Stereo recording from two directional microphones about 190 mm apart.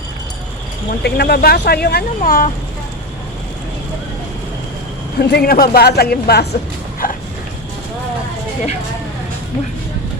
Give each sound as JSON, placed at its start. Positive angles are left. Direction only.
{"t": 0.9, "sound": "speech", "side_deg": 55}
{"t": 5.2, "sound": "speech", "side_deg": 60}
{"t": 7.0, "sound": "a sound", "side_deg": 45}